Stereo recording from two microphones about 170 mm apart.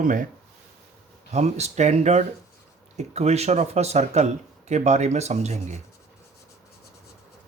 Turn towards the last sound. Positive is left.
turn(degrees=-40)  # may be behind; listen again after turning